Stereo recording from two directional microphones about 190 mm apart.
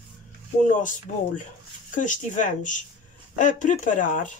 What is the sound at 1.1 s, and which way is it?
Speech, 40° left (ahead or behind).